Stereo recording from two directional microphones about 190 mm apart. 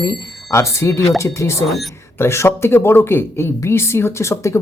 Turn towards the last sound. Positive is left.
turn(degrees=15)  # may be behind; listen again after turning